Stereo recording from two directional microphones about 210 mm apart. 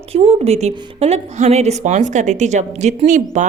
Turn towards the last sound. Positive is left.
turn(degrees=-35)  # may be behind; listen again after turning